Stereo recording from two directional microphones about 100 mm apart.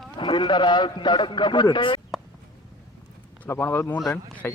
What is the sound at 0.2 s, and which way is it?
A man's voice, 50° left (ahead or behind).